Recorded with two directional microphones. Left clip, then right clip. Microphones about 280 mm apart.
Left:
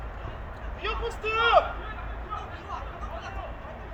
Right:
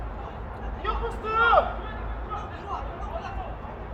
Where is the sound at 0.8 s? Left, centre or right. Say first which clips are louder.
Even; left.